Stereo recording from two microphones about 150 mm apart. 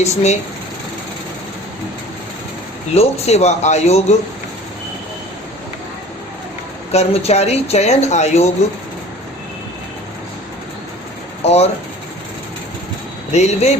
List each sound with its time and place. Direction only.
0.0 s speech: 45° left (ahead or behind)
2.9 s speech: 45° left (ahead or behind)
6.9 s speech: 45° left (ahead or behind)
11.4 s speech: 45° left (ahead or behind)
13.3 s speech: 45° left (ahead or behind)